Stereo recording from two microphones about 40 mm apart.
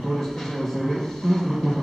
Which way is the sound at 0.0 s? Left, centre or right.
Centre.